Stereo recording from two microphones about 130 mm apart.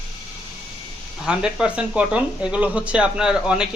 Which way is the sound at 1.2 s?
5° right (ahead or behind).